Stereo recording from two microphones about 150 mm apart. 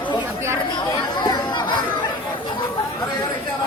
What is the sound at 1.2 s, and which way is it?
Chatter, 30° left (ahead or behind).